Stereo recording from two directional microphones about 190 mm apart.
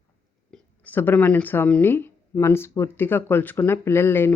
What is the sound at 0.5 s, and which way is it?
A woman's voice, 10° left (ahead or behind).